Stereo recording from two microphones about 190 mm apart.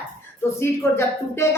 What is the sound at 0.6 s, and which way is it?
Speech, 15° left (ahead or behind).